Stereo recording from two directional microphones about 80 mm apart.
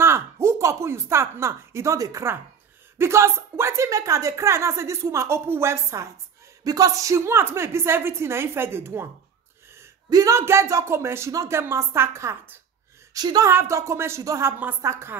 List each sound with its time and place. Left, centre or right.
0.0 s a woman's voice: right
3.0 s speech: right
6.6 s speech: right
10.0 s speech: right
10.3 s speech: right
13.1 s a woman's voice: right
13.5 s speech: right